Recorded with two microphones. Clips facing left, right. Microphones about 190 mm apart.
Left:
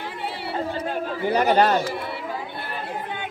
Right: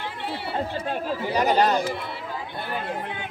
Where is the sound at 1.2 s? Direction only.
55° left (ahead or behind).